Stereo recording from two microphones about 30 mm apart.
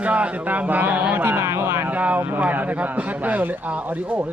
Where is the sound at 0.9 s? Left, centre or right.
Right.